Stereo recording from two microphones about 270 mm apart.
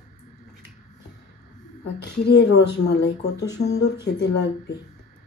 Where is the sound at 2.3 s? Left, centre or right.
Left.